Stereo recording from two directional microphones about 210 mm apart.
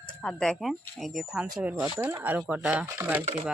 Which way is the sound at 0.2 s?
5° left (ahead or behind).